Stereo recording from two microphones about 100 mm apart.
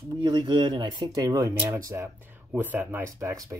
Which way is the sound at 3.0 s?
30° right (ahead or behind).